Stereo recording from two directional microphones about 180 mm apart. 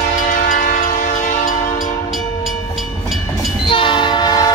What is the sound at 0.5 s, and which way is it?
Train, 50° left (ahead or behind).